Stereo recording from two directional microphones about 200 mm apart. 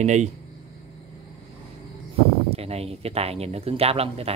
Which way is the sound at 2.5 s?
30° right (ahead or behind).